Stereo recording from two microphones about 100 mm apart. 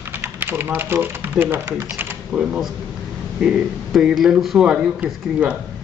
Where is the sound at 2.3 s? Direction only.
5° right (ahead or behind).